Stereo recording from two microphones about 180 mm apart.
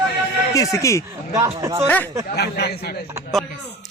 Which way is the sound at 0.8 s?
15° left (ahead or behind).